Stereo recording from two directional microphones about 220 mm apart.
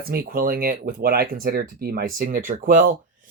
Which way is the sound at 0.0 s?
45° right (ahead or behind).